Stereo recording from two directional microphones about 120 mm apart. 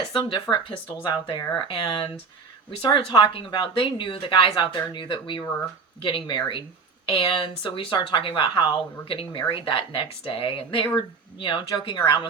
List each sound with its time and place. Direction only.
0.1 s a woman's voice: 40° left (ahead or behind)